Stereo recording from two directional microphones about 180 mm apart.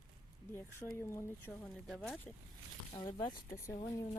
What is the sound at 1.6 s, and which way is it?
Speech, centre (ahead or behind).